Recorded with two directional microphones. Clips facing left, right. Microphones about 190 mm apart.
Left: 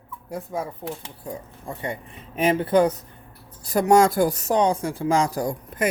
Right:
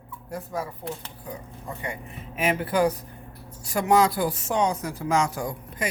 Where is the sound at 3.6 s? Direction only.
40° left (ahead or behind).